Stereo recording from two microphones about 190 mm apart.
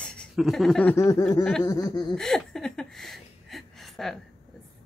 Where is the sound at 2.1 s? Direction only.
Centre (ahead or behind).